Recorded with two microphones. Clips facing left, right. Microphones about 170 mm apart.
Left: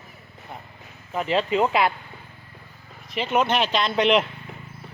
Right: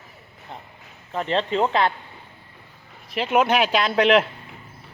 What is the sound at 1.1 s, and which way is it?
Speech, 5° left (ahead or behind).